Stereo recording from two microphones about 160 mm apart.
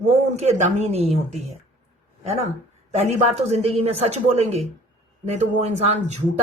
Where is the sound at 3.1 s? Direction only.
40° right (ahead or behind).